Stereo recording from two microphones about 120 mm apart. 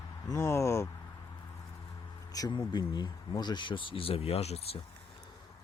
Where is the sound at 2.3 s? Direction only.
35° left (ahead or behind); by 4.6 s 60° left (ahead or behind).